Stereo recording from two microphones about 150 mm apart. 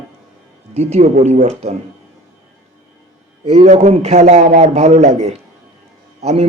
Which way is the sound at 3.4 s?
45° right (ahead or behind).